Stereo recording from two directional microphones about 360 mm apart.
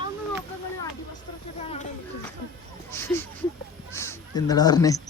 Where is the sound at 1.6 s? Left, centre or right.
Centre.